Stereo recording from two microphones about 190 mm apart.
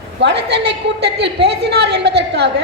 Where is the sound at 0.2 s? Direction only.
65° right (ahead or behind).